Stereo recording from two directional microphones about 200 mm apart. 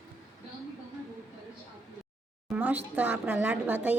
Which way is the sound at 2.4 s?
5° right (ahead or behind).